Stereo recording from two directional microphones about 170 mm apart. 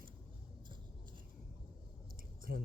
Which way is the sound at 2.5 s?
65° right (ahead or behind).